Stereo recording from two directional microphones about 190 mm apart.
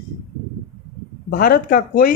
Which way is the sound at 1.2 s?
50° left (ahead or behind).